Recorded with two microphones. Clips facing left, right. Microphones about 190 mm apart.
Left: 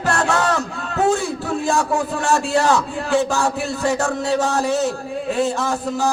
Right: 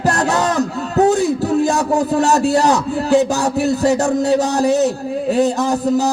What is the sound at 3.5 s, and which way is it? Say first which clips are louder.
A man's voice: right 6 dB; 40° right (ahead or behind).